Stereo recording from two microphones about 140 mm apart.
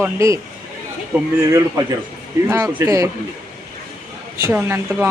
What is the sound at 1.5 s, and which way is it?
Speech, 20° right (ahead or behind).